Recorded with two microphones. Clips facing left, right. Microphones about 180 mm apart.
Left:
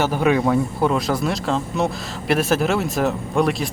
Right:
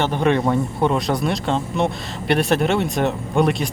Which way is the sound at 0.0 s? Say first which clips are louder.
Even; 5° left (ahead or behind).